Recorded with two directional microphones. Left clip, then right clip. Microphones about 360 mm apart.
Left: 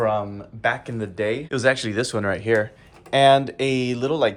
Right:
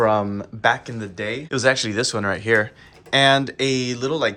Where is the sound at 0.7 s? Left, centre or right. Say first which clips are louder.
Right 4 dB; centre.